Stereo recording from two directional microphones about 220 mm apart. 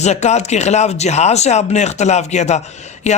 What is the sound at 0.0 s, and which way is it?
Speech, 30° left (ahead or behind).